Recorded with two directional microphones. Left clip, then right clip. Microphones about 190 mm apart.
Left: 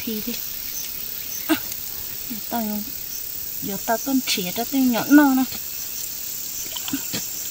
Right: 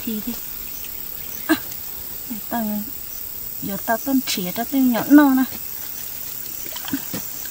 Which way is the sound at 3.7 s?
25° right (ahead or behind).